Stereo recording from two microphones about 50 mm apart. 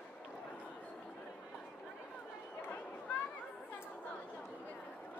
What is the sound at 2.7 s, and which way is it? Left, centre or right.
Chatter, left.